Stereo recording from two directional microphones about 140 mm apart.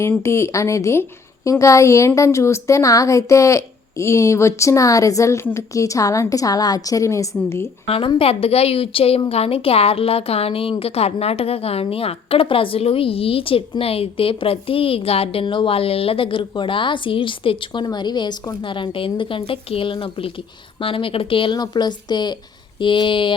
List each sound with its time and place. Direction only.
0.0 s a woman's voice: 20° left (ahead or behind)
7.9 s a woman's voice: 45° left (ahead or behind)